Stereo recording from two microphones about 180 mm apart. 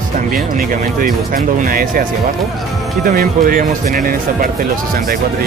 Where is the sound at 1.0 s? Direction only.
50° right (ahead or behind).